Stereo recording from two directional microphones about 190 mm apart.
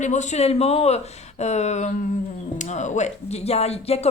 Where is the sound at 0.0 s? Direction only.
40° left (ahead or behind).